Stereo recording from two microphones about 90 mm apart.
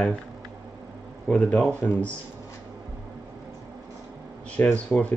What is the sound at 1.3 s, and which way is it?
Speech, 10° left (ahead or behind).